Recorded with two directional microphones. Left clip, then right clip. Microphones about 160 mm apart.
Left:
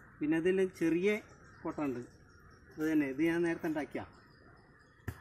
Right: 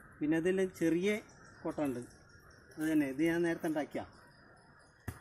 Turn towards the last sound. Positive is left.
turn(degrees=-20)  # may be behind; listen again after turning